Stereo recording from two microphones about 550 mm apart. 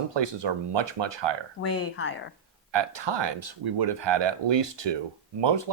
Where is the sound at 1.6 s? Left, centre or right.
Left.